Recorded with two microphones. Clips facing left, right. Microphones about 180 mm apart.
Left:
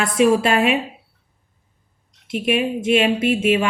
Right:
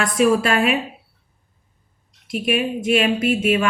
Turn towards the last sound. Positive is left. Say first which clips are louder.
# left 1 dB
turn(degrees=25)  # may be behind; listen again after turning